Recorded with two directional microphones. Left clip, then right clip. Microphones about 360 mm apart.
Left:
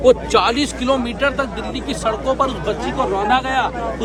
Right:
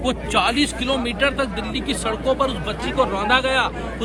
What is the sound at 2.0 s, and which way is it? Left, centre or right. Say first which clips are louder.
Speech: left 3 dB; centre.